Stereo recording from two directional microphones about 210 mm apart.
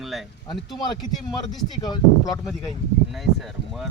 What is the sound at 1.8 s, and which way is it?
Speech, 20° left (ahead or behind).